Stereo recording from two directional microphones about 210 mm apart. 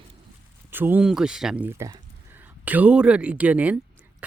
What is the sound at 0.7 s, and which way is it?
Speech, 10° right (ahead or behind).